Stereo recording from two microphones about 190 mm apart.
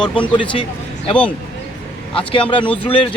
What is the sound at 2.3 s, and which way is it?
Speech, 25° left (ahead or behind).